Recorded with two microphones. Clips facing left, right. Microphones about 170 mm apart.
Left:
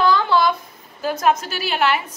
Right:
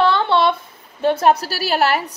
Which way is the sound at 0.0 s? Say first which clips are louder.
Right 1 dB; 30° right (ahead or behind).